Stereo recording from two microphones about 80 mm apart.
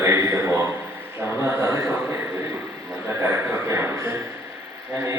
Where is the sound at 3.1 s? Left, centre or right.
Right.